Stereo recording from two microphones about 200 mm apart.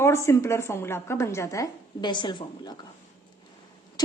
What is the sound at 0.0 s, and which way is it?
A woman's voice, 15° left (ahead or behind).